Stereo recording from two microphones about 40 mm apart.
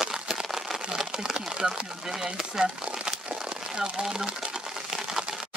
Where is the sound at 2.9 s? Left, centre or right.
Centre.